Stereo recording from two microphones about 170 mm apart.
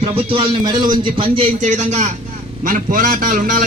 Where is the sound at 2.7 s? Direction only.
55° right (ahead or behind).